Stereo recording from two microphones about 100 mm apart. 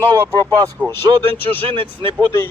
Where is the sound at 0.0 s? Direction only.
20° left (ahead or behind).